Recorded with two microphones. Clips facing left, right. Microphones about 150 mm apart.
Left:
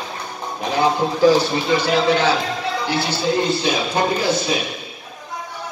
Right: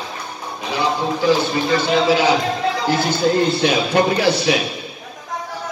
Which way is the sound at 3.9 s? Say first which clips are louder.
Right 3 dB; 70° right (ahead or behind).